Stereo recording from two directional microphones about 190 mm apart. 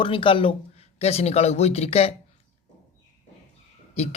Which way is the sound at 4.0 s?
35° left (ahead or behind).